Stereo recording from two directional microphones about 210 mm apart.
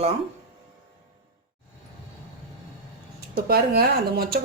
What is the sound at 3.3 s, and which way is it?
Speech, 50° right (ahead or behind).